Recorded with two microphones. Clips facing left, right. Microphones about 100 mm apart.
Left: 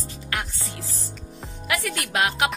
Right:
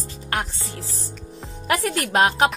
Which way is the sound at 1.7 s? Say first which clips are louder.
Right 5 dB; 40° right (ahead or behind).